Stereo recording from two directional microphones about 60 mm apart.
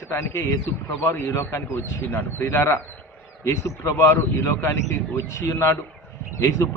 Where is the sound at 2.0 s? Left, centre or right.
Left.